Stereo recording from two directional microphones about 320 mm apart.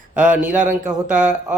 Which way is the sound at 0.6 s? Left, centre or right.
Centre.